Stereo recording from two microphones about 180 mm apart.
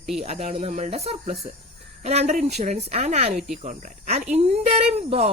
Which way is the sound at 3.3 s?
Centre (ahead or behind).